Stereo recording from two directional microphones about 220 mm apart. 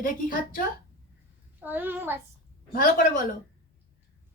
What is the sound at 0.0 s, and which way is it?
Speech, 35° left (ahead or behind).